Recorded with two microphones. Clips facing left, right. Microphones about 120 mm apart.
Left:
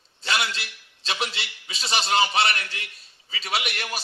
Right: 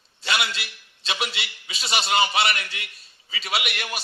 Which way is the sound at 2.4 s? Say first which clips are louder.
Even; 35° left (ahead or behind).